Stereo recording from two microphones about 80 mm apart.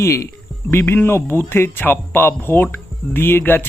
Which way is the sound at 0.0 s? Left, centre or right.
Left.